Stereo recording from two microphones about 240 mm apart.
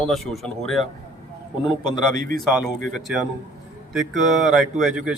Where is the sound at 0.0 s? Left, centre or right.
Centre.